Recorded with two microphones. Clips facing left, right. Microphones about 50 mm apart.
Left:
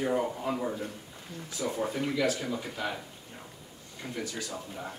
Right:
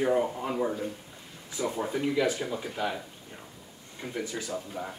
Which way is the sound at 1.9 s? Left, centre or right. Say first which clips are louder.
Right 4 dB; right.